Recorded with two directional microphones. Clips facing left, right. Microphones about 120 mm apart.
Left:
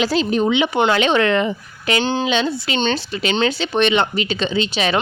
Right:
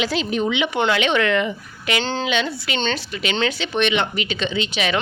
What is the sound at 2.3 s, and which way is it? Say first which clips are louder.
Speech: left 3 dB; 30° left (ahead or behind).